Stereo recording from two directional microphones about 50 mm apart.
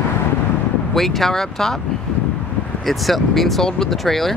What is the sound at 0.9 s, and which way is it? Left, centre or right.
Speech, centre.